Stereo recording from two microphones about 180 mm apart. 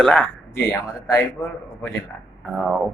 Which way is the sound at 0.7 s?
15° left (ahead or behind).